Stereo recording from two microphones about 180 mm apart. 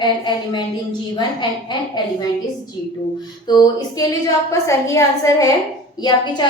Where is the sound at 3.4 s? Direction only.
20° left (ahead or behind).